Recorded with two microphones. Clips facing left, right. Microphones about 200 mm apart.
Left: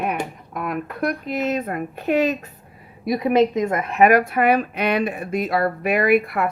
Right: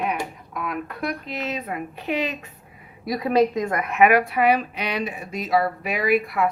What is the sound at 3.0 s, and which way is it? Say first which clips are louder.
Speech: left 2 dB; 20° left (ahead or behind).